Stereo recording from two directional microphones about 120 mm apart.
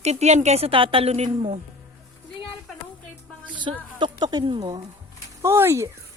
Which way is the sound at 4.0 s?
35° right (ahead or behind).